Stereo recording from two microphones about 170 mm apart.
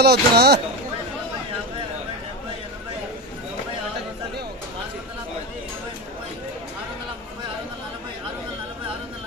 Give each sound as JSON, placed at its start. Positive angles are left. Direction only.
{"t": 0.0, "sound": "speech", "side_deg": -70}